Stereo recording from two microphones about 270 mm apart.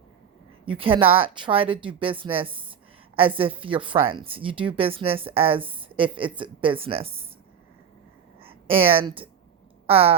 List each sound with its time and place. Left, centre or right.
0.6 s a woman's voice: centre
8.4 s a woman's voice: centre